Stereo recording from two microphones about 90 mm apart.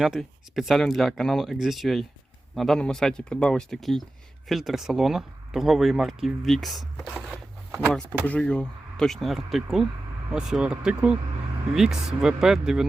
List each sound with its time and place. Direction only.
0.0 s speech: 5° right (ahead or behind)
8.3 s speech: 15° left (ahead or behind); by 12.8 s 5° right (ahead or behind)